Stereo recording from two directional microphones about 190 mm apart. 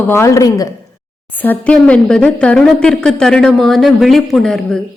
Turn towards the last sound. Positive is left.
turn(degrees=0)  # may be behind; listen again after turning